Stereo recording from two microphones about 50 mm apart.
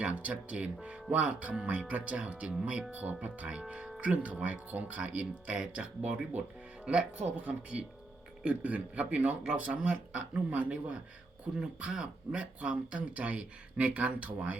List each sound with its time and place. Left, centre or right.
0.0 s speech: right
3.6 s speech: centre